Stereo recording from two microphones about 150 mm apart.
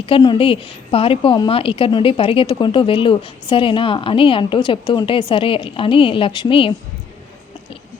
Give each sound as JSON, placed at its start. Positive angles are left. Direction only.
{"t": 0.0, "sound": "a woman's voice", "side_deg": 35}